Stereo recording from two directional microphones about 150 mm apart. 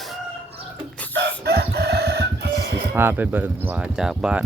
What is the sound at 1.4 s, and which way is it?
Chicken, 90° right.